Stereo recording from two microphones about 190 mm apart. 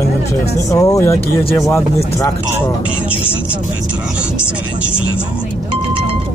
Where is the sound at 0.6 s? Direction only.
15° left (ahead or behind).